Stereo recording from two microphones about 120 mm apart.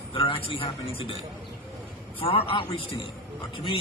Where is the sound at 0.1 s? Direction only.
50° left (ahead or behind).